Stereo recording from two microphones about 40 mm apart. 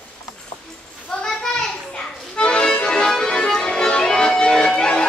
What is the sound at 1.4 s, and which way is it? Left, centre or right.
Children playing, centre.